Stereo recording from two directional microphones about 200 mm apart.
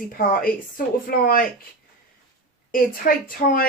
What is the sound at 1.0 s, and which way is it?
Speech, 45° left (ahead or behind).